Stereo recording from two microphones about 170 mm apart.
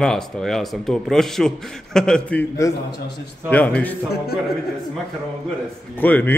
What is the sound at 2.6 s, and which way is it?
A man's voice, 20° left (ahead or behind).